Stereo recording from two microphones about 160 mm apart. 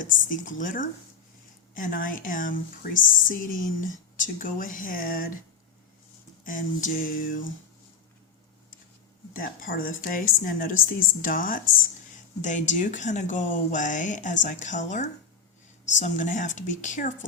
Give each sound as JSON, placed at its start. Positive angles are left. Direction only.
{"t": 0.0, "sound": "a woman's voice", "side_deg": 55}
{"t": 6.4, "sound": "a woman's voice", "side_deg": 60}
{"t": 9.3, "sound": "a woman's voice", "side_deg": 60}